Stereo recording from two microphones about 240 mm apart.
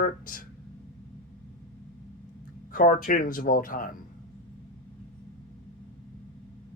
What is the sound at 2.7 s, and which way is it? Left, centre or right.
Speech, left.